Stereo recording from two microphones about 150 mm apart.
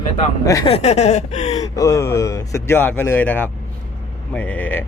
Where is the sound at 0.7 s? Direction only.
45° left (ahead or behind).